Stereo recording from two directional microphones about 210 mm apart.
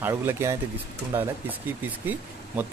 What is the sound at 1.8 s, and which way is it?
Speech, 10° right (ahead or behind).